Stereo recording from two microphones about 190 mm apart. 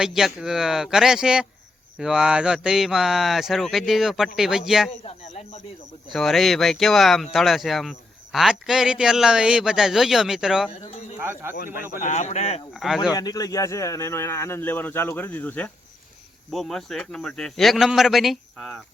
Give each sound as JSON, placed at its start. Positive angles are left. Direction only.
{"t": 0.0, "sound": "a man's voice", "side_deg": 0}
{"t": 5.0, "sound": "speech", "side_deg": 35}
{"t": 6.1, "sound": "a man's voice", "side_deg": 0}
{"t": 11.5, "sound": "speech", "side_deg": 50}
{"t": 12.7, "sound": "a man's voice", "side_deg": 0}
{"t": 13.1, "sound": "a man's voice", "side_deg": 20}